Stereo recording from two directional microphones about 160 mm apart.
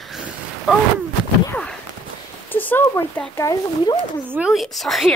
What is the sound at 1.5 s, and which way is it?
Speech, 5° left (ahead or behind).